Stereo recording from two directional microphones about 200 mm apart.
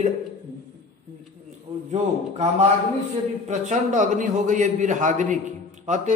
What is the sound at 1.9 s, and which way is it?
A man's voice, 35° right (ahead or behind).